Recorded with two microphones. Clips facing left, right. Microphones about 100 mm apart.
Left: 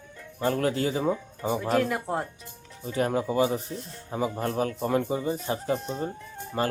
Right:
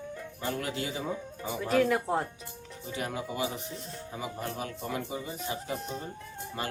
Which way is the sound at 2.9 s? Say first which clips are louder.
Left 9 dB; 40° left (ahead or behind).